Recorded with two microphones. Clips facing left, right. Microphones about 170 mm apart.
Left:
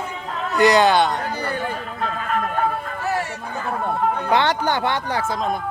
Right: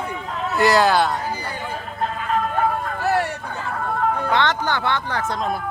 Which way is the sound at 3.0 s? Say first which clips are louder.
Right 4 dB; 65° right (ahead or behind).